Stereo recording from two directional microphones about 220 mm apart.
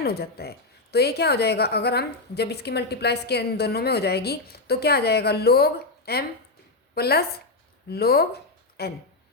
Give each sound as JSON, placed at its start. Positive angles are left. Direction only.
{"t": 0.0, "sound": "a woman's voice", "side_deg": 45}